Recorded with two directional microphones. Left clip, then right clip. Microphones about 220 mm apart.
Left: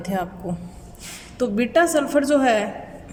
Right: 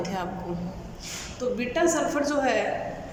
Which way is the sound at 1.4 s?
40° left (ahead or behind).